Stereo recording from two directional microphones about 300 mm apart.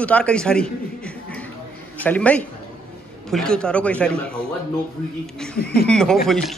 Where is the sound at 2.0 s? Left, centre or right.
Centre.